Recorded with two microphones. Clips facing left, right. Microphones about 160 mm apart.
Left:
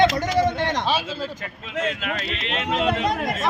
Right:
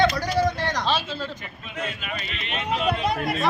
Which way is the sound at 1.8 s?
90° left.